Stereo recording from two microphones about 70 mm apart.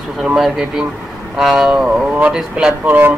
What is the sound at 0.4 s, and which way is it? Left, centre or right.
Speech, centre.